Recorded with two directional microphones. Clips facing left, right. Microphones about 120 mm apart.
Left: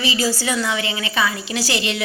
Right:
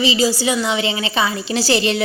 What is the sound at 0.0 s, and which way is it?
A woman's voice, 20° right (ahead or behind).